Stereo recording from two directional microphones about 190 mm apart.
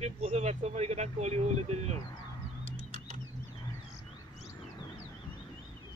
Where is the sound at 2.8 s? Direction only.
45° right (ahead or behind).